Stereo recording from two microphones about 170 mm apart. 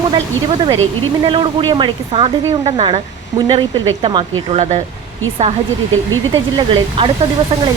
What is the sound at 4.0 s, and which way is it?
Speech, 35° right (ahead or behind).